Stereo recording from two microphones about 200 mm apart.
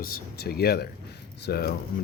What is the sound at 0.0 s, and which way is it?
Speech, 50° left (ahead or behind).